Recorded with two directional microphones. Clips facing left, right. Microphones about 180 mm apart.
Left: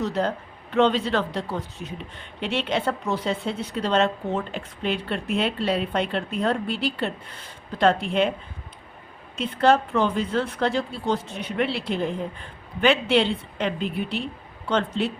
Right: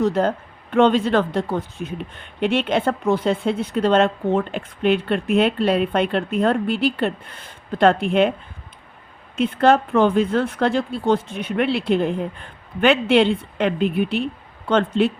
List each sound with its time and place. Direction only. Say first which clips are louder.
0.0 s speech: right 6 dB; 50° right (ahead or behind)
9.3 s speech: right 4 dB; 55° right (ahead or behind)